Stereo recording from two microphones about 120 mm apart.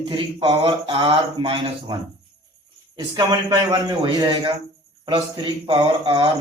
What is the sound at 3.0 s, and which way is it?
A man's voice, 35° right (ahead or behind).